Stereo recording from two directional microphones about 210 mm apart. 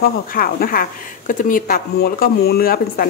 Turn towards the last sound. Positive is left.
turn(degrees=45)  # may be behind; listen again after turning